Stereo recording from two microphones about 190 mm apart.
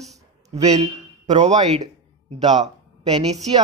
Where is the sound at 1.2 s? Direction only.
35° right (ahead or behind).